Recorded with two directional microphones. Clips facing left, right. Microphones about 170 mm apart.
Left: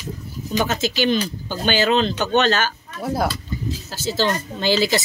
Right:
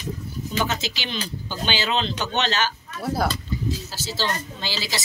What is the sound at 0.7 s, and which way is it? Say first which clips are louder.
Speech: left 9 dB; 50° left (ahead or behind).